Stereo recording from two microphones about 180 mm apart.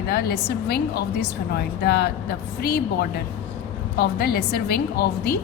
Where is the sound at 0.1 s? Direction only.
65° left (ahead or behind).